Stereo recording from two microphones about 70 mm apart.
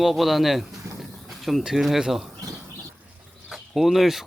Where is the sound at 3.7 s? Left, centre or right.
Centre.